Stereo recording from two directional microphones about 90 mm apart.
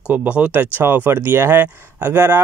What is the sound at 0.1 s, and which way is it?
Speech, 15° right (ahead or behind).